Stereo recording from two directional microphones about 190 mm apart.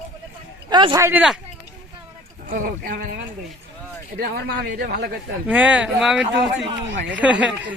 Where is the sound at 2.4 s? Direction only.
45° right (ahead or behind).